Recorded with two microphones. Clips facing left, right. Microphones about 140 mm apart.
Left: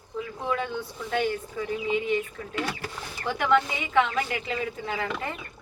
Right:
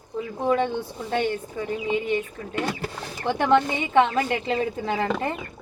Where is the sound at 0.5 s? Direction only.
25° right (ahead or behind).